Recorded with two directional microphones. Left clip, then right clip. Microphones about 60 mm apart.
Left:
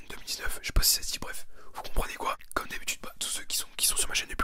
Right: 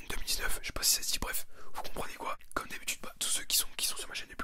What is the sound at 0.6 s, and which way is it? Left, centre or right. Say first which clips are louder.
Speech: left 3 dB; centre.